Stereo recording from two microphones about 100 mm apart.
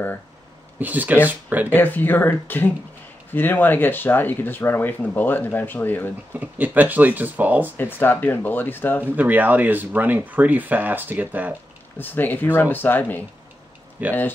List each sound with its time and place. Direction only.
0.7 s speech: 15° right (ahead or behind)
1.7 s speech: 20° left (ahead or behind)
6.3 s speech: 15° right (ahead or behind)
7.7 s speech: 20° left (ahead or behind)
9.0 s speech: 15° right (ahead or behind)
12.0 s speech: 20° left (ahead or behind)
14.0 s speech: 20° right (ahead or behind)